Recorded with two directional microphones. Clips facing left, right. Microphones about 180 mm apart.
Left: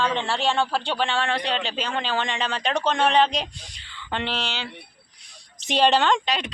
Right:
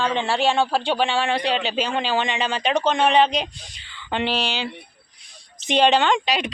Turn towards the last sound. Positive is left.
turn(degrees=-10)  # may be behind; listen again after turning